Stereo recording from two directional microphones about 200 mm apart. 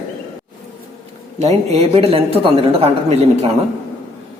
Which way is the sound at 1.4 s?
30° right (ahead or behind).